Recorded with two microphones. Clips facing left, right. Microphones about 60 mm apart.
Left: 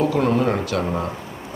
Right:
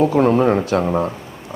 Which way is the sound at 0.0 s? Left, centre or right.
Right.